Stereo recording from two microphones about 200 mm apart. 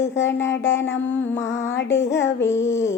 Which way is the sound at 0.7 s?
65° left (ahead or behind).